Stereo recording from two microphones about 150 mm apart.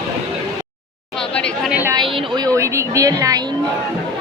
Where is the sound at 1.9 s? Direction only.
30° right (ahead or behind).